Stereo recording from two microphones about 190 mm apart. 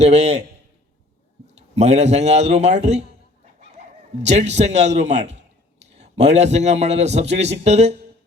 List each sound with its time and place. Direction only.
0.0 s a man's voice: 35° right (ahead or behind)
1.5 s a man's voice: 35° right (ahead or behind)